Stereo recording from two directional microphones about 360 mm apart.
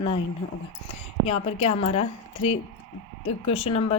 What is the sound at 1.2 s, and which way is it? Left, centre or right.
A woman's voice, centre.